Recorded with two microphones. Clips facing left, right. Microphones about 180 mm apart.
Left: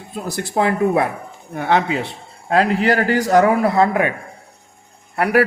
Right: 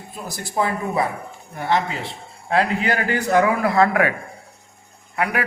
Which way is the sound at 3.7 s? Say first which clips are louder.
Left 1 dB; 20° left (ahead or behind).